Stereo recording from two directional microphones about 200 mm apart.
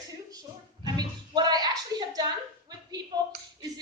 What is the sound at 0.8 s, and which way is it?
Music, 20° right (ahead or behind).